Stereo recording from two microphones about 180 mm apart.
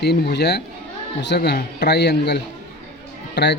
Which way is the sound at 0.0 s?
65° left (ahead or behind).